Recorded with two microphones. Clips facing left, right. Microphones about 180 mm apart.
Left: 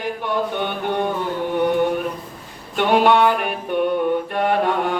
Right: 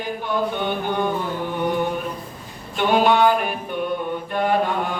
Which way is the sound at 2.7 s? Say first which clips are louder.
Left 2 dB; 70° left (ahead or behind).